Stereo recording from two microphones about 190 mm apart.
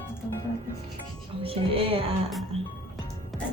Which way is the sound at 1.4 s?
30° right (ahead or behind).